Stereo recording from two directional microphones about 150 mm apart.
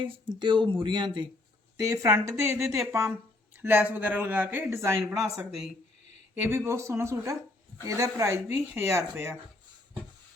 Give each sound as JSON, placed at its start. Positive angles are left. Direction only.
{"t": 0.3, "sound": "speech", "side_deg": -30}
{"t": 6.3, "sound": "speech", "side_deg": -15}